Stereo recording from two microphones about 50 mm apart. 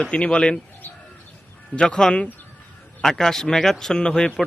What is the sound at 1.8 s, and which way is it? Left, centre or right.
Speech, centre.